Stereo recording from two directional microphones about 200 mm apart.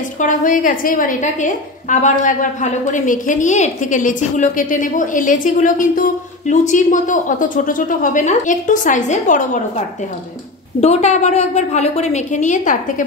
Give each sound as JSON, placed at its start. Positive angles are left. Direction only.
{"t": 0.2, "sound": "a woman's voice", "side_deg": 40}
{"t": 10.8, "sound": "a woman's voice", "side_deg": 35}